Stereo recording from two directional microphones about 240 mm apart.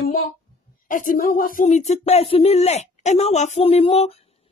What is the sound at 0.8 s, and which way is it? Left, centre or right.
Speech, left.